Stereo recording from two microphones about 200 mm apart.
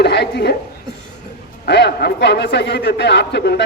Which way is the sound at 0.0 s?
55° left (ahead or behind).